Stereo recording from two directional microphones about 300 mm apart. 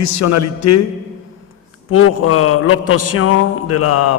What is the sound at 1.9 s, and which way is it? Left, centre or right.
A man's voice, left.